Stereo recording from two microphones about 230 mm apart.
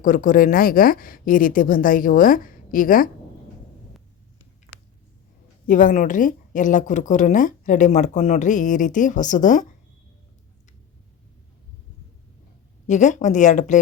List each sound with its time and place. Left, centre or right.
0.0 s a woman's voice: left
5.6 s a woman's voice: left
12.9 s a woman's voice: left